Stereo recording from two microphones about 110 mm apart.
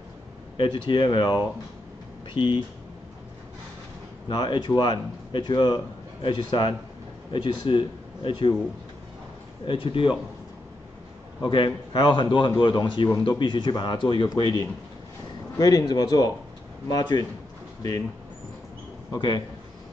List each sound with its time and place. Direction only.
0.6 s a man's voice: 45° left (ahead or behind)
4.3 s a man's voice: 40° left (ahead or behind)
9.7 s a man's voice: 50° left (ahead or behind)
11.4 s a man's voice: 45° left (ahead or behind)
19.1 s a man's voice: 40° left (ahead or behind)